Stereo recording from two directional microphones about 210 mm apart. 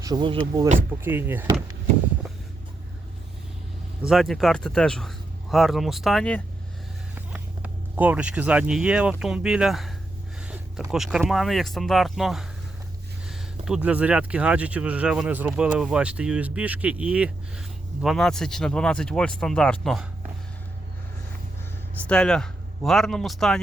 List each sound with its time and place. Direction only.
0.0 s speech: 20° right (ahead or behind)
0.9 s speech: 10° right (ahead or behind)
4.0 s speech: centre (ahead or behind)
7.3 s speech: 5° right (ahead or behind)
10.9 s speech: centre (ahead or behind)
22.0 s speech: 5° left (ahead or behind)